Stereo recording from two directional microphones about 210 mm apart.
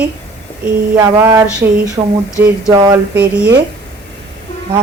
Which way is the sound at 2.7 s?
20° right (ahead or behind).